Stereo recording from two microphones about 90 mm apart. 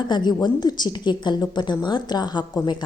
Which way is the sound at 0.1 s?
55° left (ahead or behind).